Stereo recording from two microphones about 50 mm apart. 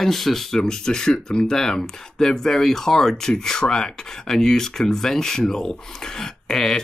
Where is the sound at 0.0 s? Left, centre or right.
Centre.